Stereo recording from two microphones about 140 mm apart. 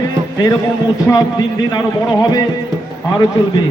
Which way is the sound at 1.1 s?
30° left (ahead or behind).